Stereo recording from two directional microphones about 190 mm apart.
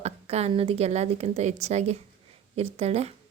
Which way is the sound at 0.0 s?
35° right (ahead or behind).